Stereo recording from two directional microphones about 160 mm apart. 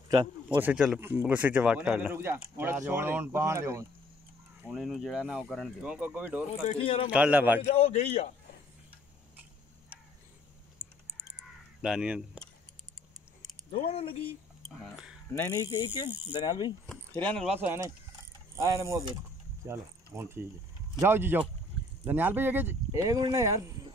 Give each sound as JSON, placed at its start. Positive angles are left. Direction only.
{"t": 0.5, "sound": "a man's voice", "side_deg": -10}
{"t": 4.6, "sound": "a man's voice", "side_deg": 0}
{"t": 6.6, "sound": "a man's voice", "side_deg": 35}
{"t": 7.1, "sound": "a man's voice", "side_deg": -10}
{"t": 7.6, "sound": "a man's voice", "side_deg": 40}
{"t": 11.8, "sound": "speech", "side_deg": -5}
{"t": 13.7, "sound": "a man's voice", "side_deg": 35}
{"t": 14.8, "sound": "speech", "side_deg": -5}
{"t": 15.3, "sound": "speech", "side_deg": 20}
{"t": 16.8, "sound": "a sound", "side_deg": 10}
{"t": 17.6, "sound": "a man's voice", "side_deg": -15}